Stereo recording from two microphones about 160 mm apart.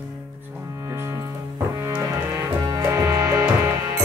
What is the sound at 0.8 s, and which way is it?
Music, 20° right (ahead or behind).